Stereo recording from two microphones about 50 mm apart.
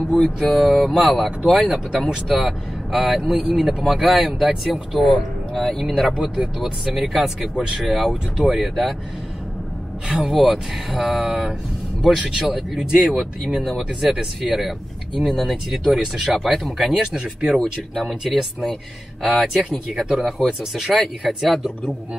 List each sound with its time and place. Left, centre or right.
0.4 s speech: centre
1.6 s speech: centre
2.2 s speech: centre
6.1 s speech: centre
10.0 s speech: centre
17.0 s speech: centre
18.0 s speech: centre